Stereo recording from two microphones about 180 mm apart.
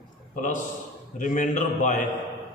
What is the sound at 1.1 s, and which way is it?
Speech, 45° left (ahead or behind).